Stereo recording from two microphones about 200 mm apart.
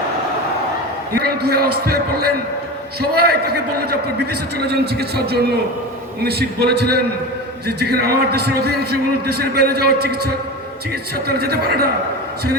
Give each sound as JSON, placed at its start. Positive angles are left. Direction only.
{"t": 1.1, "sound": "a man's voice", "side_deg": -50}